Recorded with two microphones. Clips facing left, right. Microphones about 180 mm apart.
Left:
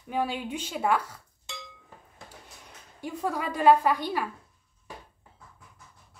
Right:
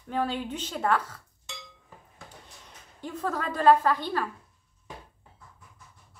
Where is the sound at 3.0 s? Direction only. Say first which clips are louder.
Left 1 dB; 10° left (ahead or behind).